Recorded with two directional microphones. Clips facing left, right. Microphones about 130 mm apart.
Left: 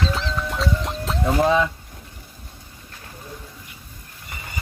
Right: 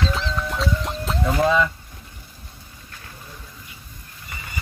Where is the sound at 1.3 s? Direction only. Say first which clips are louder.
Left 1 dB; 25° left (ahead or behind).